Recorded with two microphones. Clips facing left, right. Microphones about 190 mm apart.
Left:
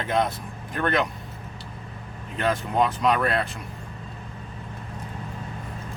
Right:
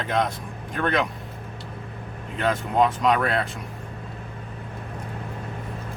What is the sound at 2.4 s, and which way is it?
Speech, centre (ahead or behind).